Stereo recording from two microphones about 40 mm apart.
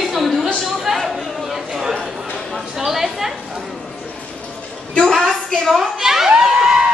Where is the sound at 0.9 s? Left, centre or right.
Centre.